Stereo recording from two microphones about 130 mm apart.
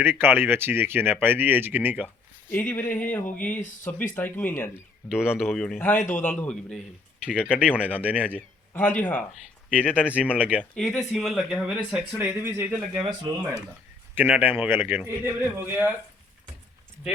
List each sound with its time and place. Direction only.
0.0 s speech: 15° right (ahead or behind)
2.5 s speech: 15° left (ahead or behind)
4.7 s speech: 5° right (ahead or behind)
7.3 s speech: 5° right (ahead or behind)
8.4 s speech: 10° left (ahead or behind)
9.9 s speech: 10° right (ahead or behind)
10.6 s speech: 5° left (ahead or behind); by 15.9 s 15° right (ahead or behind)